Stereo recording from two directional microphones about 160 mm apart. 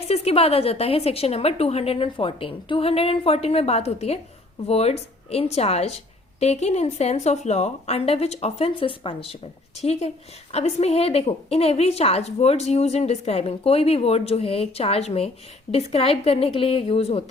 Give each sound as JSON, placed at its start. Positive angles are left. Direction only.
{"t": 0.1, "sound": "a woman's voice", "side_deg": 40}